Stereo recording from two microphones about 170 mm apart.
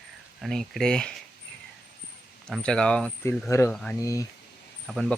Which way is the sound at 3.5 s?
15° left (ahead or behind).